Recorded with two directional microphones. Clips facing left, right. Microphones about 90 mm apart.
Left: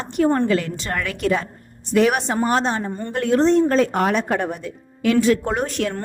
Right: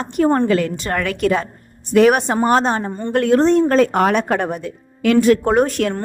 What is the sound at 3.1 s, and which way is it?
Speech, 60° right (ahead or behind).